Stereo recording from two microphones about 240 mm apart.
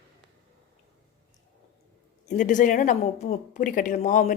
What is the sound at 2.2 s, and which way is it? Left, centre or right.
A woman's voice, left.